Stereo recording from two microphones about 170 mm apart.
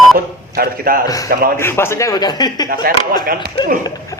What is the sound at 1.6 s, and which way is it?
Speech, 15° left (ahead or behind).